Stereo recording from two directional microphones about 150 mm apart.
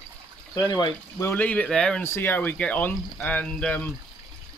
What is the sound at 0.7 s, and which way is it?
Speech, 30° left (ahead or behind).